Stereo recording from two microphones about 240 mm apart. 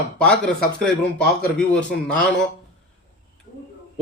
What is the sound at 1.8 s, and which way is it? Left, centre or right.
Speech, left.